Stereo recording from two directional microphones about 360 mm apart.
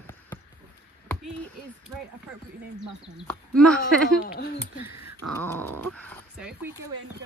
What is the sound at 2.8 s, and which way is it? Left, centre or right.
Speech, centre.